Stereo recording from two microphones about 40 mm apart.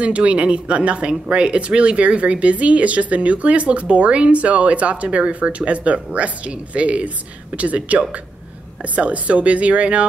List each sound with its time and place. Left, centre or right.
0.0 s speech: right